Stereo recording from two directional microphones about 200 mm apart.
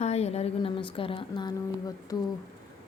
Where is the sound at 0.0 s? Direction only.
30° left (ahead or behind).